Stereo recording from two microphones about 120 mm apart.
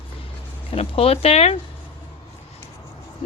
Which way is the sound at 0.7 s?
55° left (ahead or behind).